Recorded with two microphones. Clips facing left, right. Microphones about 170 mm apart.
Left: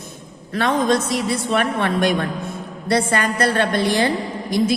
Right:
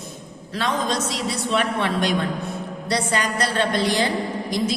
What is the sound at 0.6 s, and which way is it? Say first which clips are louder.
A woman's voice: left 6 dB; 55° left (ahead or behind).